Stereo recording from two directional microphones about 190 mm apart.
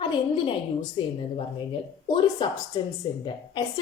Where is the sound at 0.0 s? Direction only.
25° left (ahead or behind).